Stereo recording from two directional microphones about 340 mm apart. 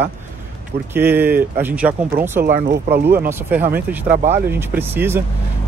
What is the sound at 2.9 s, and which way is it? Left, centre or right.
A man's voice, centre.